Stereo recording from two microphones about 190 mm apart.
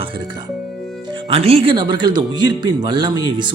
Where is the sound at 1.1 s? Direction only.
25° right (ahead or behind).